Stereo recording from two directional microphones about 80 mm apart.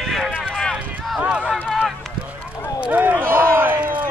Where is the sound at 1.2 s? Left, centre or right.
Centre.